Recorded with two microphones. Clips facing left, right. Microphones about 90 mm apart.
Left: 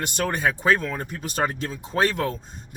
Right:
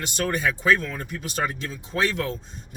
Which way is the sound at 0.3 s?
40° left (ahead or behind).